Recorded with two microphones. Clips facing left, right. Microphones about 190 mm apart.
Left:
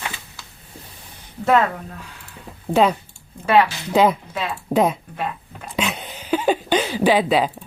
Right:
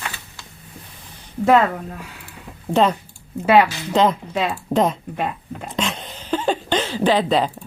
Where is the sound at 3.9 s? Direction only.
10° left (ahead or behind).